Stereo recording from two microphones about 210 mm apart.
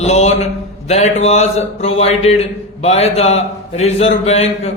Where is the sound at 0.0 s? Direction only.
30° left (ahead or behind).